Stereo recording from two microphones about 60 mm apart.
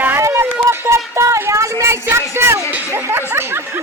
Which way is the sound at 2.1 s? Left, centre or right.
Right.